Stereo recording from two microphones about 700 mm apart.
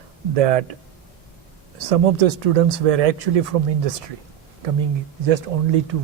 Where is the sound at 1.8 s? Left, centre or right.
Right.